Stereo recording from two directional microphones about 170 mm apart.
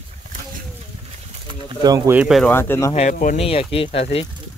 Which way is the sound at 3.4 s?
35° left (ahead or behind).